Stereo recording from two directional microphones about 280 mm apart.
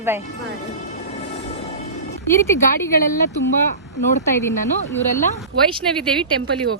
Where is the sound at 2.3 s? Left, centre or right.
Centre.